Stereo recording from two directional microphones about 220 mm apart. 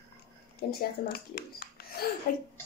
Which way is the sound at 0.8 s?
45° left (ahead or behind).